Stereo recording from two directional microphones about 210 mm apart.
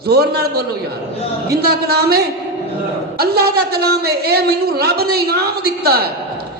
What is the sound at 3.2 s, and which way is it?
A man's voice, 50° right (ahead or behind).